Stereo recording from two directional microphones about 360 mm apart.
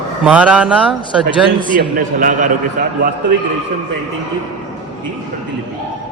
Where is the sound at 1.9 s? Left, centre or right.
Right.